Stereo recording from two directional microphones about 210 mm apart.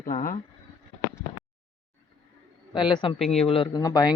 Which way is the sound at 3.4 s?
25° left (ahead or behind).